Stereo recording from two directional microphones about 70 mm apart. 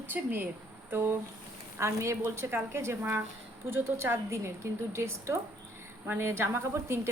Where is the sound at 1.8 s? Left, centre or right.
Right.